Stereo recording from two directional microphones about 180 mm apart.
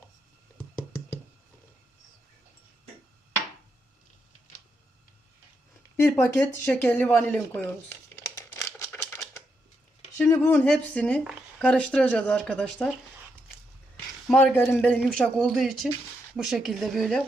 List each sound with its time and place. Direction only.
6.1 s speech: 10° left (ahead or behind)
7.6 s crumpling: 15° left (ahead or behind)
10.2 s speech: 15° left (ahead or behind)
13.9 s speech: 10° left (ahead or behind)